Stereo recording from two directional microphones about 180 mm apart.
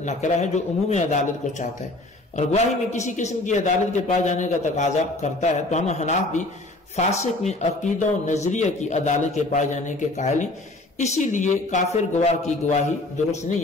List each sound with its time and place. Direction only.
0.0 s a man's voice: 40° left (ahead or behind)